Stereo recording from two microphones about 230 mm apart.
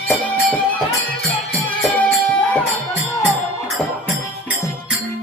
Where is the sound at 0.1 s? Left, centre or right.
Centre.